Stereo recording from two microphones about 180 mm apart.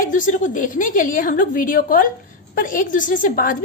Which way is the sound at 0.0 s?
45° left (ahead or behind).